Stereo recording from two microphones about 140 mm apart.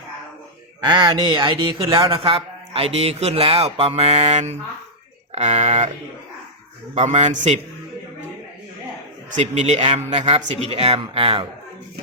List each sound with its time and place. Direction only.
0.8 s a man's voice: 30° right (ahead or behind); by 5.9 s 55° right (ahead or behind)
6.9 s a man's voice: 55° right (ahead or behind)
9.4 s speech: 55° right (ahead or behind)